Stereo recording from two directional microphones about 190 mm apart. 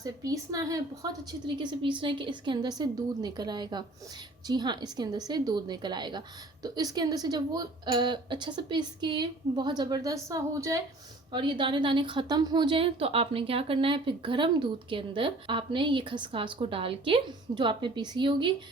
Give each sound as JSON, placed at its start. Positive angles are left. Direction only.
{"t": 0.0, "sound": "a woman's voice", "side_deg": -20}